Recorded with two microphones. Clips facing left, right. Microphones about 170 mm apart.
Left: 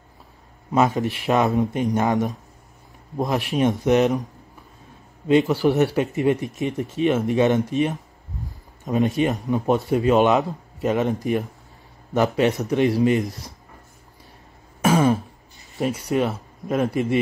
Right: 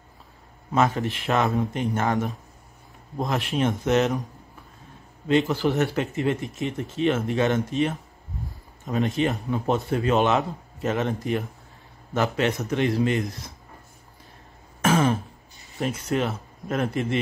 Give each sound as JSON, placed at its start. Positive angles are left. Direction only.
{"t": 0.7, "sound": "speech", "side_deg": 15}
{"t": 5.3, "sound": "speech", "side_deg": 15}
{"t": 14.8, "sound": "throat clearing", "side_deg": 10}
{"t": 15.8, "sound": "speech", "side_deg": 10}